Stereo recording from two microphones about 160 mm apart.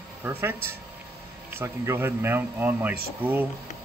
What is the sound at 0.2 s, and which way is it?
Speech, 15° right (ahead or behind).